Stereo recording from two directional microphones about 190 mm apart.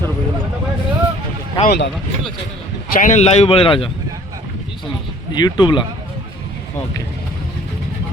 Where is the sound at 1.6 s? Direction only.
55° left (ahead or behind).